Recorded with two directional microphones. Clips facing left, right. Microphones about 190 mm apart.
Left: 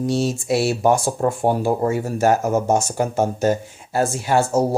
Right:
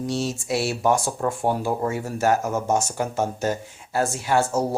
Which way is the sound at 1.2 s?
40° left (ahead or behind).